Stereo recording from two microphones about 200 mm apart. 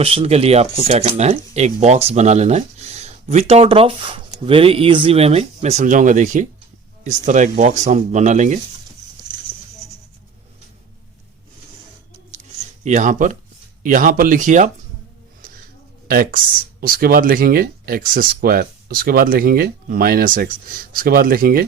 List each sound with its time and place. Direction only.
0.0 s speech: 30° right (ahead or behind)
12.8 s speech: 35° right (ahead or behind)
16.0 s speech: 45° right (ahead or behind)